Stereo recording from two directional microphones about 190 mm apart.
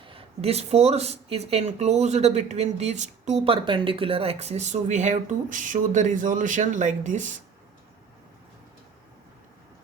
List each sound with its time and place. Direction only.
0.0 s speech: 30° right (ahead or behind)